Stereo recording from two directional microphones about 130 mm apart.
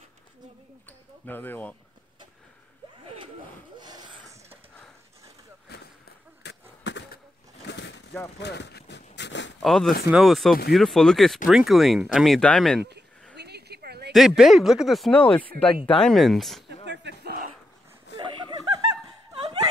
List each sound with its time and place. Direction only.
0.8 s speech: 15° left (ahead or behind)
3.7 s a sound: 35° right (ahead or behind)
9.6 s speech: centre (ahead or behind)
15.6 s speech: 40° left (ahead or behind)
16.0 s speech: centre (ahead or behind)
18.1 s a sound: 40° right (ahead or behind)